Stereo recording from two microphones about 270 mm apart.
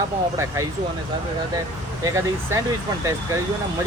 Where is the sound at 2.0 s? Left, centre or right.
Centre.